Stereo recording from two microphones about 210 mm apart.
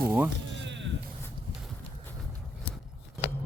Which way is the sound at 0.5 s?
60° right (ahead or behind).